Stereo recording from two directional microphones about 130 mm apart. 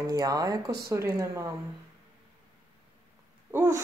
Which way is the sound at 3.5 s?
20° right (ahead or behind).